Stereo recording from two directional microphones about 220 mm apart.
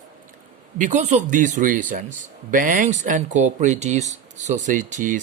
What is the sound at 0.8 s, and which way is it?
Speech, 35° right (ahead or behind).